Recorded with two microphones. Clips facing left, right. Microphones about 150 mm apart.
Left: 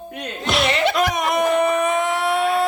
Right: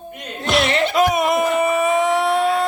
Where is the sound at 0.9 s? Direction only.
Centre (ahead or behind).